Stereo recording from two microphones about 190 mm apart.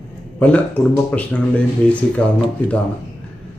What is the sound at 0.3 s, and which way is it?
Speech, 5° left (ahead or behind).